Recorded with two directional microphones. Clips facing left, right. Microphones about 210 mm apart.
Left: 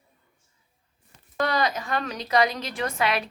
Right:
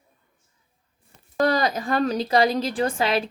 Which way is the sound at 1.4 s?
35° right (ahead or behind).